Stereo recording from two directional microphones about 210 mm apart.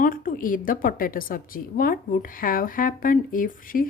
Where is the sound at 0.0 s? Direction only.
40° left (ahead or behind).